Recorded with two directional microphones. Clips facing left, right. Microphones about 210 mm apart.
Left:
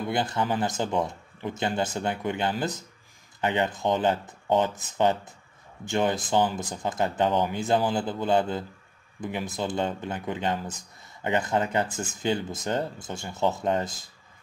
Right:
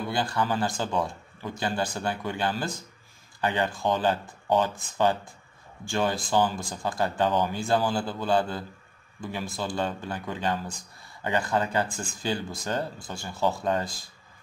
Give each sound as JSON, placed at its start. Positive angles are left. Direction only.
{"t": 0.1, "sound": "speech", "side_deg": 20}